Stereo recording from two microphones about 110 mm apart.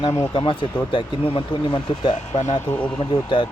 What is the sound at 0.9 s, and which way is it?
Speech, 50° left (ahead or behind).